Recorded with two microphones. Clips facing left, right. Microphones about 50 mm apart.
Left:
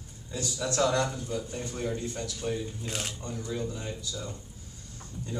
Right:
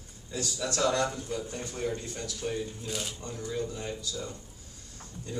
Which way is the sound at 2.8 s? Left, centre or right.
Left.